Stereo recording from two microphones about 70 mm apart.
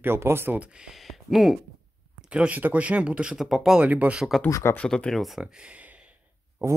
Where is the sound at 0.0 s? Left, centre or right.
Right.